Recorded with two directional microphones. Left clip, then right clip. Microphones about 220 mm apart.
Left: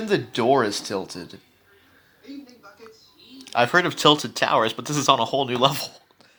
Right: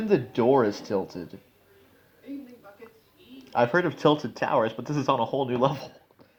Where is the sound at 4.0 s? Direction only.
50° left (ahead or behind).